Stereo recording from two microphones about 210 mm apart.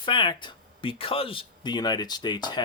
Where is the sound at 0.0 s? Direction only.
25° left (ahead or behind).